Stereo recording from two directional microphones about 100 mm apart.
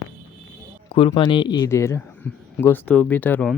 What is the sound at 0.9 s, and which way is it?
Speech, 60° left (ahead or behind).